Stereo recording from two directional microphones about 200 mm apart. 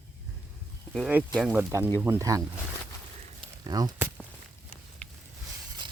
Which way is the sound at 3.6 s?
20° right (ahead or behind).